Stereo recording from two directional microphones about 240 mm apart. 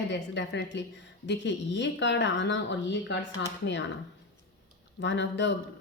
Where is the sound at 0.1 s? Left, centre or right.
Left.